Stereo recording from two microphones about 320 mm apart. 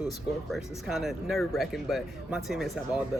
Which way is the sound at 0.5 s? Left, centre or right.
Centre.